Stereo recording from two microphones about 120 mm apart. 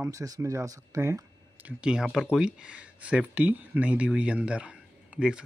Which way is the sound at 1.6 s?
5° right (ahead or behind).